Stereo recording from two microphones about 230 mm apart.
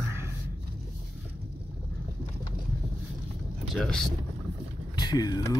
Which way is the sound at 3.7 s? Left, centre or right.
Centre.